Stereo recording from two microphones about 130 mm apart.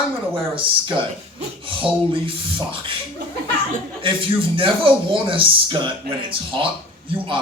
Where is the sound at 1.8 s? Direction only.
45° right (ahead or behind).